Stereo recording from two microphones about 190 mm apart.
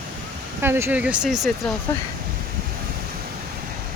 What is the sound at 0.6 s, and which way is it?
Speech, 10° right (ahead or behind).